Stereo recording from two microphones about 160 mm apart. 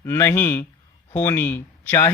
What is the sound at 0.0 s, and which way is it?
Speech, 15° left (ahead or behind).